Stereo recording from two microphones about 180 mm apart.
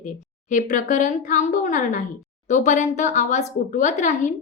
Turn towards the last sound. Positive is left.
turn(degrees=45)  # may be behind; listen again after turning